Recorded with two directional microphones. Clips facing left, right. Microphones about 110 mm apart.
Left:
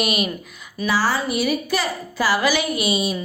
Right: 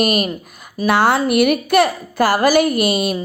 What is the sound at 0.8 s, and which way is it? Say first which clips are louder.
A woman's voice: right 6 dB; 60° right (ahead or behind).